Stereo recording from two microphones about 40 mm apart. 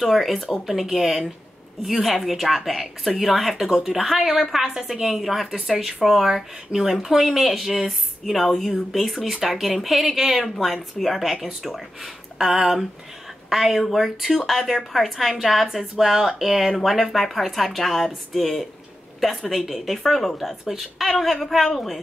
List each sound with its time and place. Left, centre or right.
0.0 s a woman's voice: centre